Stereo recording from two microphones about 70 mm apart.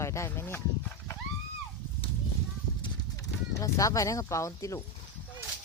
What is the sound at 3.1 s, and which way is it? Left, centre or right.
Speech, left.